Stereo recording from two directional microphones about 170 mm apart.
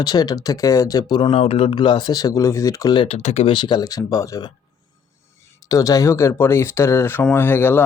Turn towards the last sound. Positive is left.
turn(degrees=10)  # may be behind; listen again after turning